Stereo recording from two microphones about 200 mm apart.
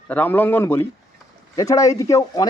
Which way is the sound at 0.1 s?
10° left (ahead or behind).